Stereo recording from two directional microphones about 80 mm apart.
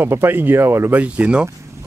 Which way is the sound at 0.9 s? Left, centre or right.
Centre.